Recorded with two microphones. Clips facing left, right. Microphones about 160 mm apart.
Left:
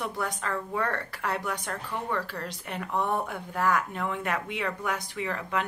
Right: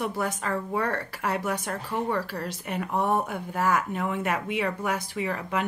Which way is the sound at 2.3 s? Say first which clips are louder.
Right 4 dB; 10° right (ahead or behind).